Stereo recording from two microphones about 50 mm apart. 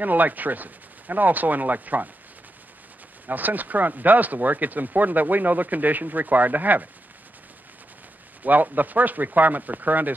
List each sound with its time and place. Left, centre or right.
0.0 s speech: right
3.3 s speech: right
8.4 s speech: right